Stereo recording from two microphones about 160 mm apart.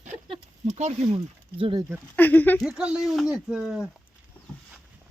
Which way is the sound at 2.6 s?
5° right (ahead or behind).